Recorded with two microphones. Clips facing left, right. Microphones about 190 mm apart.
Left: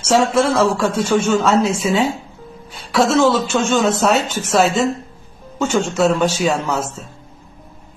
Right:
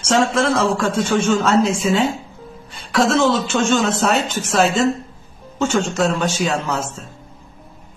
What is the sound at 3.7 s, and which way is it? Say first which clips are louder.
A woman's voice: left 2 dB; centre (ahead or behind).